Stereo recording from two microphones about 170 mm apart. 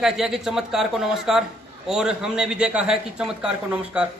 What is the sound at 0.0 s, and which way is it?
A man's voice, centre (ahead or behind).